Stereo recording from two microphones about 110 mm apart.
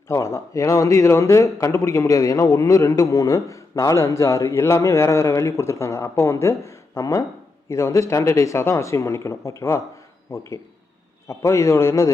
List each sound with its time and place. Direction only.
0.1 s a man's voice: 25° left (ahead or behind)